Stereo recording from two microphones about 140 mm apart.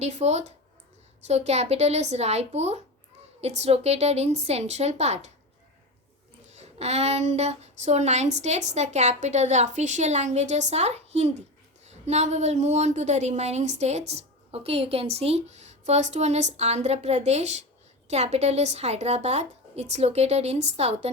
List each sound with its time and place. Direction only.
0.0 s a woman's voice: 50° right (ahead or behind)
6.5 s a woman's voice: 50° right (ahead or behind)